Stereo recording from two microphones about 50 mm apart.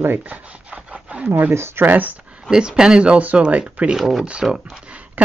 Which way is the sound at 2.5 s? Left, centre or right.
Centre.